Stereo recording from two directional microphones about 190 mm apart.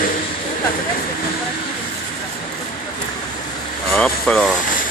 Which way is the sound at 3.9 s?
5° left (ahead or behind).